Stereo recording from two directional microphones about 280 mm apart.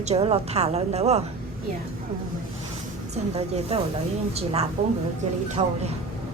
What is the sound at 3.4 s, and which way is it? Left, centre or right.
A woman's voice, right.